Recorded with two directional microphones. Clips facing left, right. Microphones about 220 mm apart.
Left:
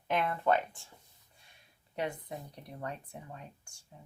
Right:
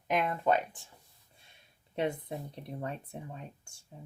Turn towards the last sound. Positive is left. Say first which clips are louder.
# right 3 dB
turn(degrees=-25)  # may be behind; listen again after turning